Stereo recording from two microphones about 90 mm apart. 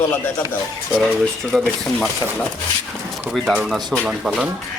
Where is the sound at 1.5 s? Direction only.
10° left (ahead or behind).